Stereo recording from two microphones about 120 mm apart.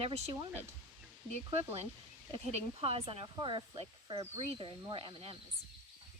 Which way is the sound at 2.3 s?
55° right (ahead or behind).